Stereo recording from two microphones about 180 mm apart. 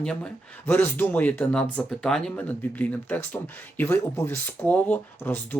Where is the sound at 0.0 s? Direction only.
5° left (ahead or behind).